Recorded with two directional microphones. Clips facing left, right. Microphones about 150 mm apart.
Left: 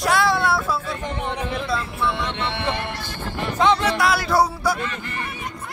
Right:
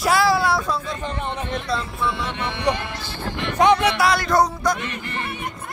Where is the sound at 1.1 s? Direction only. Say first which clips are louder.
Left 1 dB; 15° left (ahead or behind).